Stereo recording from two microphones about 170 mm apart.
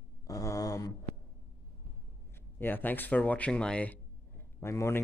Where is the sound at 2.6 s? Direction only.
10° left (ahead or behind).